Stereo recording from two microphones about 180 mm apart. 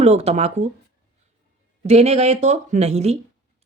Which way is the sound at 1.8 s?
35° right (ahead or behind).